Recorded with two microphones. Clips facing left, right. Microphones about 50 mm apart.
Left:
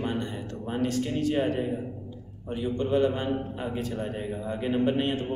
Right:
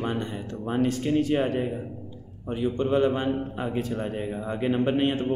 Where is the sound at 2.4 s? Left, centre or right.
Right.